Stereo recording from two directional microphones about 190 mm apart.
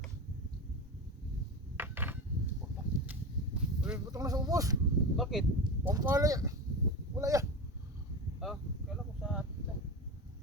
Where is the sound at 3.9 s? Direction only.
20° right (ahead or behind).